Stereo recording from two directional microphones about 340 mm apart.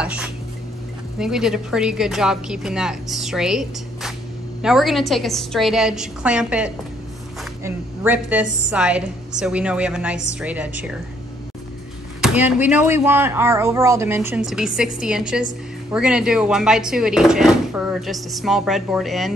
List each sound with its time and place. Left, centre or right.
0.0 s a sound: centre
1.1 s speech: centre
12.2 s speech: centre